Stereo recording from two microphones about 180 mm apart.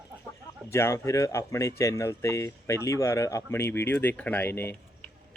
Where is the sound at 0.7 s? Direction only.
15° left (ahead or behind).